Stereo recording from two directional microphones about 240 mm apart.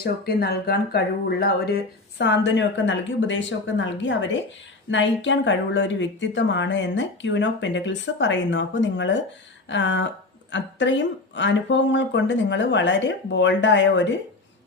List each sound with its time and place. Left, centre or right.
0.0 s a woman's voice: left